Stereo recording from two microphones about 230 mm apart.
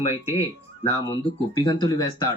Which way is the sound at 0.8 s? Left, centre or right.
Left.